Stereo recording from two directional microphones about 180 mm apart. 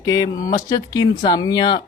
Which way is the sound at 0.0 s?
20° left (ahead or behind).